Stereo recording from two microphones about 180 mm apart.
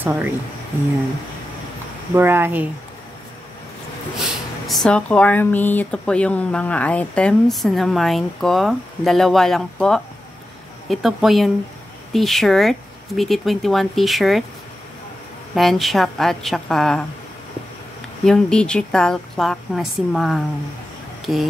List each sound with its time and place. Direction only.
0.0 s speech: 10° right (ahead or behind)
2.1 s speech: 10° right (ahead or behind)
4.6 s speech: 5° left (ahead or behind)
15.5 s speech: centre (ahead or behind)
18.2 s speech: 5° left (ahead or behind)